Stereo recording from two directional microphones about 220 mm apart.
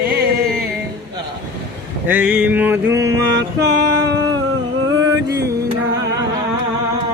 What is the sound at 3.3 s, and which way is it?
Music, 50° right (ahead or behind).